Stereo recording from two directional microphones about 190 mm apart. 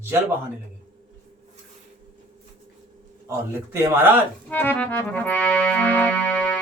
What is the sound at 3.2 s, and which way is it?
Speech, 15° right (ahead or behind).